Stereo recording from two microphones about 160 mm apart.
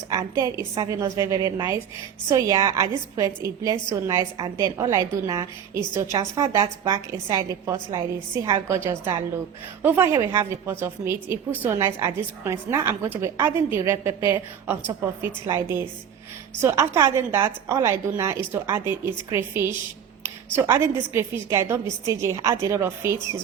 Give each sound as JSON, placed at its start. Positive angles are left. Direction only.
{"t": 0.1, "sound": "a woman's voice", "side_deg": -20}